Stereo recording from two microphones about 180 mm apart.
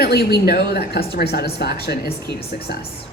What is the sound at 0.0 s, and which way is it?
A man's voice, 60° left (ahead or behind).